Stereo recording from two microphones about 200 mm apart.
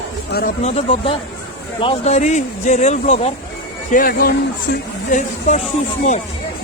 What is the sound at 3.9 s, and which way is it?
Speech, 45° left (ahead or behind).